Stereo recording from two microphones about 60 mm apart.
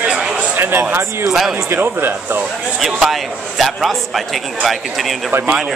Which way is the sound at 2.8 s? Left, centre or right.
Centre.